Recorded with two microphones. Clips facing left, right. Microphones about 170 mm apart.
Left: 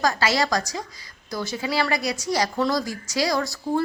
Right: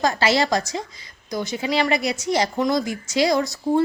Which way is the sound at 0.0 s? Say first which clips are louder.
Right 2 dB; 25° right (ahead or behind).